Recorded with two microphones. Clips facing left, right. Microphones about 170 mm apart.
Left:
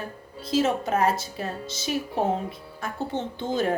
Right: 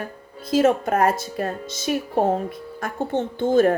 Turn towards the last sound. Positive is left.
turn(degrees=-50)  # may be behind; listen again after turning